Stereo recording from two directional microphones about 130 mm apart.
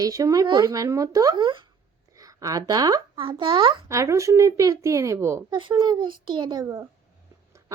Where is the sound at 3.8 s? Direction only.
25° right (ahead or behind).